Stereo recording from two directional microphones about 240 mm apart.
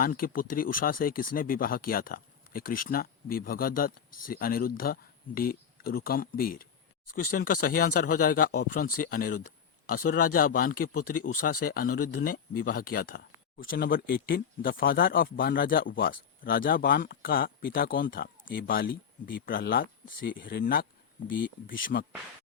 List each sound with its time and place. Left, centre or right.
0.0 s speech: left